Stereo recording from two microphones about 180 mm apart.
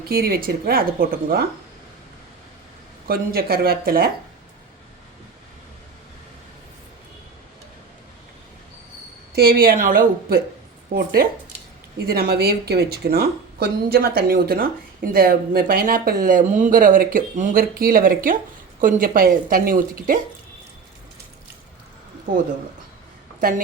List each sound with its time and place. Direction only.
0.1 s speech: 55° right (ahead or behind)
3.1 s speech: 55° right (ahead or behind)
9.3 s speech: 60° right (ahead or behind)
23.4 s speech: 50° right (ahead or behind)